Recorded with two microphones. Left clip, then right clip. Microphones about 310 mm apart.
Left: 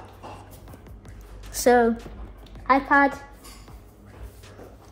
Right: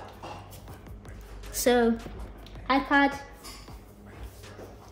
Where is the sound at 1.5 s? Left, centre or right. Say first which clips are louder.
Left 5 dB; centre.